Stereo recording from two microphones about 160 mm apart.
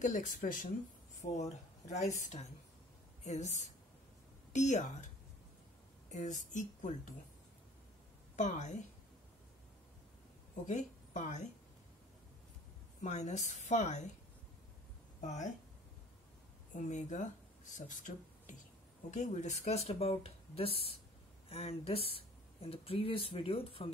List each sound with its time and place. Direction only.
0.0 s speech: 50° left (ahead or behind)
1.2 s speech: 45° left (ahead or behind)
4.5 s speech: 50° left (ahead or behind)
6.0 s speech: 50° left (ahead or behind)
8.4 s speech: 50° left (ahead or behind)
10.7 s speech: 50° left (ahead or behind)
13.0 s speech: 45° left (ahead or behind)
15.2 s speech: 50° left (ahead or behind)
16.7 s speech: 50° left (ahead or behind)